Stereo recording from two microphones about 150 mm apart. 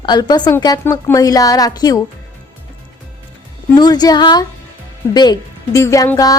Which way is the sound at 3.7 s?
25° left (ahead or behind).